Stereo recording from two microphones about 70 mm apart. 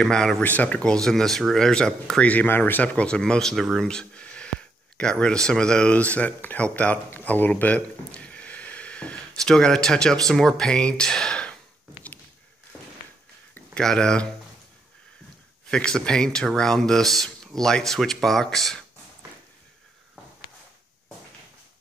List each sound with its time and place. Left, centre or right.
0.0 s speech: centre
0.4 s speech: left
0.7 s speech: centre
2.2 s speech: left
13.7 s speech: centre
15.7 s speech: centre